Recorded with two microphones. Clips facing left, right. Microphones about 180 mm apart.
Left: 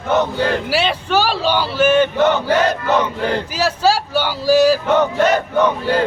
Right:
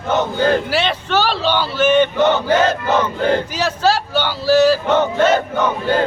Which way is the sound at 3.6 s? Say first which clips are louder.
Left 1 dB; 10° left (ahead or behind).